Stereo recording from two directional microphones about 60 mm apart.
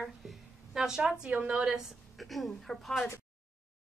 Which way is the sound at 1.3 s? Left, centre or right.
Right.